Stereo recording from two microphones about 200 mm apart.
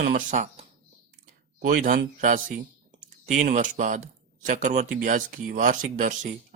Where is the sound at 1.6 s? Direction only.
45° right (ahead or behind).